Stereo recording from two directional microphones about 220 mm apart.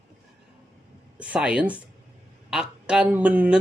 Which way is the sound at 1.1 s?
5° right (ahead or behind).